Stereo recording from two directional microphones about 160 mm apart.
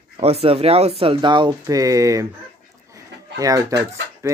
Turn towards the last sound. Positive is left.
turn(degrees=-20)  # may be behind; listen again after turning